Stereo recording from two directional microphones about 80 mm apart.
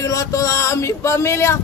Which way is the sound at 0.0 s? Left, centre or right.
Left.